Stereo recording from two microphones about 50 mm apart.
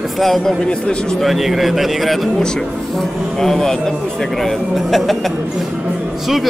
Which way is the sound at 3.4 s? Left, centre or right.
Centre.